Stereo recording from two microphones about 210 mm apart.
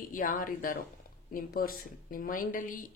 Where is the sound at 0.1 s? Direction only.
40° left (ahead or behind).